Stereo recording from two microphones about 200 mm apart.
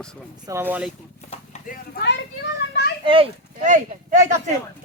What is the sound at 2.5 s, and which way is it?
Children playing, 60° left (ahead or behind).